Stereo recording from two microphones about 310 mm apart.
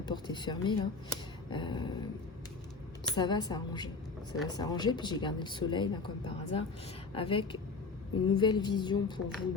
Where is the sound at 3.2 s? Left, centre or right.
Centre.